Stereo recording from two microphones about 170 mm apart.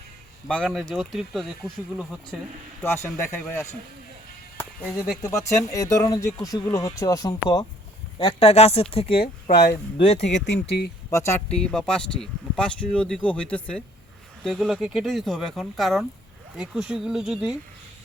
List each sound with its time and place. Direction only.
0.4 s speech: 5° left (ahead or behind)
2.8 s speech: 15° left (ahead or behind)
5.2 s speech: 15° left (ahead or behind)
8.2 s speech: 35° left (ahead or behind)
10.3 s speech: 90° left
11.1 s speech: 15° left (ahead or behind); by 17.5 s 5° right (ahead or behind)